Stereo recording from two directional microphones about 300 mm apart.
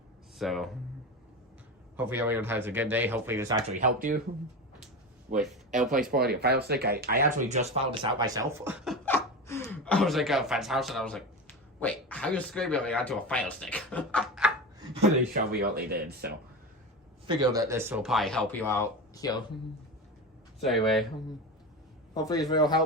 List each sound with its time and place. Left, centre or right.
0.3 s speech: centre
2.0 s speech: centre
3.8 s speech: right
5.4 s speech: centre
5.9 s speech: right; by 14.5 s centre
15.3 s speech: right
17.2 s speech: centre
20.7 s speech: centre
22.1 s a man's voice: centre